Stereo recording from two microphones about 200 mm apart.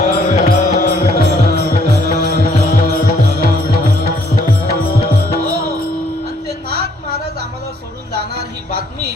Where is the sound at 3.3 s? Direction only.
55° right (ahead or behind).